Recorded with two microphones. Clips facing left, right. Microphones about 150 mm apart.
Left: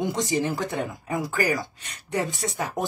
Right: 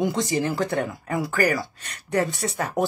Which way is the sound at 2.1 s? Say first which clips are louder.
Right 3 dB; 65° right (ahead or behind).